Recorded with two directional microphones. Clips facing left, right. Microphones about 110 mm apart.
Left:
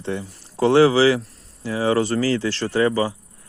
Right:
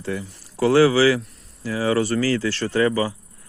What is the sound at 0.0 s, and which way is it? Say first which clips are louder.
Speech: left 1 dB; 25° left (ahead or behind).